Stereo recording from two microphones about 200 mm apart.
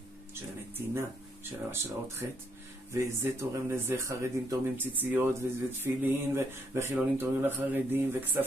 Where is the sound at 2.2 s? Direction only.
15° right (ahead or behind).